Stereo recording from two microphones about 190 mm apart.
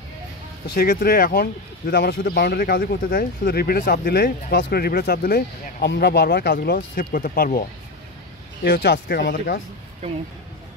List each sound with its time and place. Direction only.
0.7 s speech: 55° left (ahead or behind)
8.6 s speech: 55° left (ahead or behind)